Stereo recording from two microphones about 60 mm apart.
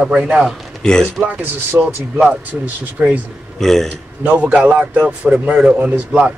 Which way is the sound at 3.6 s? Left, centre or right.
Centre.